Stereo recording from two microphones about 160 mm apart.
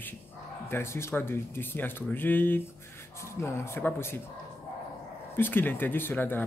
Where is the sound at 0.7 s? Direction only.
15° left (ahead or behind).